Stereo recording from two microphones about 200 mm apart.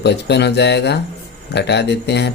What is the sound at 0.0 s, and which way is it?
Speech, 55° left (ahead or behind).